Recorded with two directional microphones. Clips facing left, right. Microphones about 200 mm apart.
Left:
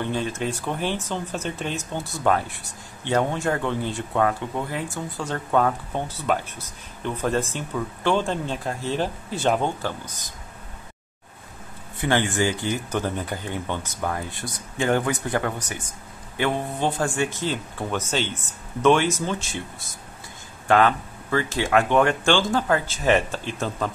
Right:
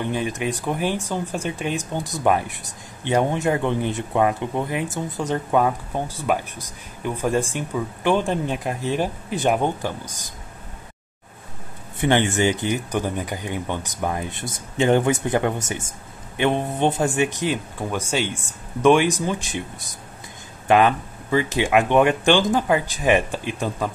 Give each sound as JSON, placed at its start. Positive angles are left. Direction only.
{"t": 0.0, "sound": "speech", "side_deg": -15}
{"t": 12.0, "sound": "speech", "side_deg": -20}